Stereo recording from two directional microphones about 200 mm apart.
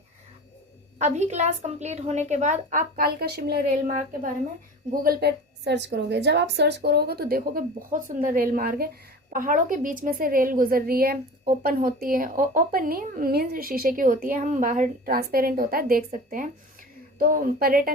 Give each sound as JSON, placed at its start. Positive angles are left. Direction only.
{"t": 0.9, "sound": "a woman's voice", "side_deg": -35}